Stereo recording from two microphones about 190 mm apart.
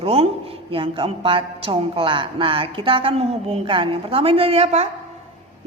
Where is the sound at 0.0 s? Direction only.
30° right (ahead or behind).